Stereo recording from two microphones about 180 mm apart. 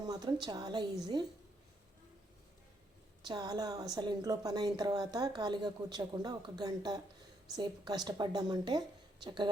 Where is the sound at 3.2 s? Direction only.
20° right (ahead or behind).